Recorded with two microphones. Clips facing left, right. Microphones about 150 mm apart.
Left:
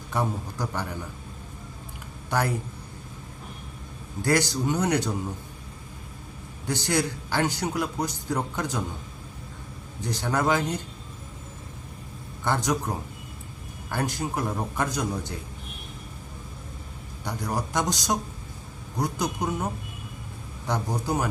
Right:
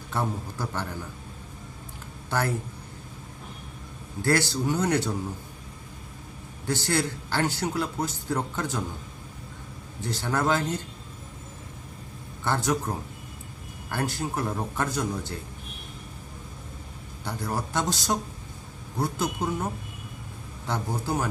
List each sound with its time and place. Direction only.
0.1 s a man's voice: 15° left (ahead or behind)
4.2 s a man's voice: 15° left (ahead or behind)
6.7 s a man's voice: 15° left (ahead or behind)
10.0 s a man's voice: 15° left (ahead or behind)
12.5 s a man's voice: 15° left (ahead or behind)
13.9 s a man's voice: 15° left (ahead or behind)
17.2 s a man's voice: 15° left (ahead or behind)
20.7 s a man's voice: 15° left (ahead or behind)